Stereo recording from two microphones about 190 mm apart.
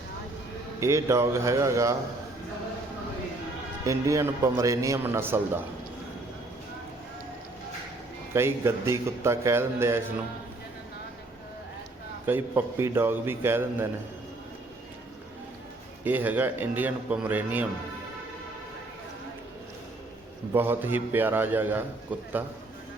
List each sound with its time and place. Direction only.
0.8 s a man's voice: 15° right (ahead or behind)
3.8 s a man's voice: 15° right (ahead or behind)
8.3 s a man's voice: 15° right (ahead or behind)
12.2 s a man's voice: 10° right (ahead or behind)
16.0 s a man's voice: 10° right (ahead or behind)
20.5 s a man's voice: 10° right (ahead or behind)